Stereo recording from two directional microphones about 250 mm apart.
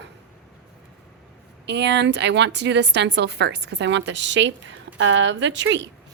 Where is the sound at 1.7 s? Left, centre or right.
Right.